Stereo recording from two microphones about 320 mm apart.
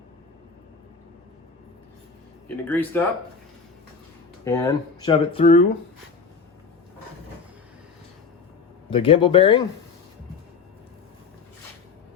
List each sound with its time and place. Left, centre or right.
2.6 s speech: centre
4.4 s speech: centre
8.9 s speech: centre